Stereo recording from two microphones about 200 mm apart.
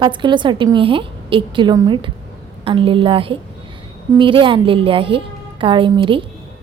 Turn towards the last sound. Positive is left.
turn(degrees=-25)  # may be behind; listen again after turning